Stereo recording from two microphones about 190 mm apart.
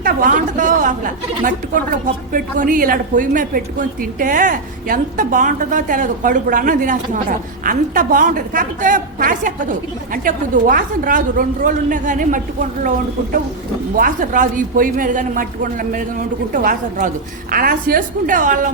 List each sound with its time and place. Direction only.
0.0 s a woman's voice: 45° right (ahead or behind)
13.9 s a woman's voice: 45° right (ahead or behind)